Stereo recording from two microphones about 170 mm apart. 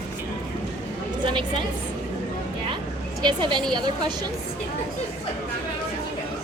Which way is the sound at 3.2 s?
30° right (ahead or behind).